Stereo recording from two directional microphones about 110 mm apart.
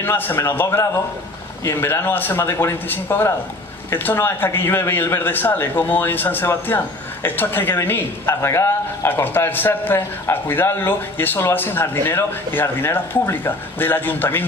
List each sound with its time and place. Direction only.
0.0 s a man's voice: 20° left (ahead or behind)